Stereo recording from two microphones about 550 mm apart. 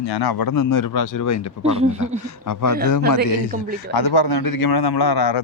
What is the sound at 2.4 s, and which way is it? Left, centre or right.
A man's voice, left.